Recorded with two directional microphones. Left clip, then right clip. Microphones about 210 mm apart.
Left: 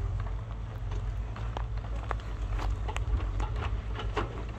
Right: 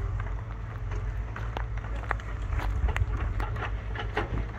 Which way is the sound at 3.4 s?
55° left (ahead or behind).